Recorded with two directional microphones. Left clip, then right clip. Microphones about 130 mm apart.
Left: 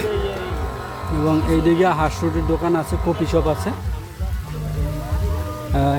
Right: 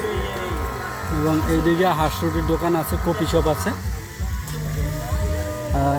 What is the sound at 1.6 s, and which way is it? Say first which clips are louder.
Speech: left 2 dB; 30° left (ahead or behind).